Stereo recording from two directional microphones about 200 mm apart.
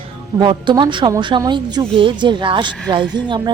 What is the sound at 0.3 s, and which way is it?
Speech, 20° right (ahead or behind).